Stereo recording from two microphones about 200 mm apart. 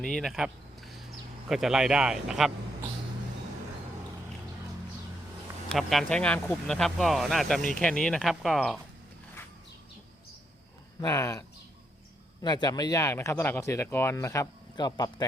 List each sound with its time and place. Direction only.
0.0 s speech: centre (ahead or behind)
5.6 s speech: centre (ahead or behind)
11.0 s speech: 15° left (ahead or behind)